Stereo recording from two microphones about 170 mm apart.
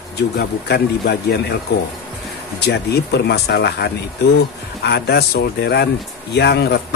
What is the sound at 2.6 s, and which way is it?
Speech, 75° left (ahead or behind).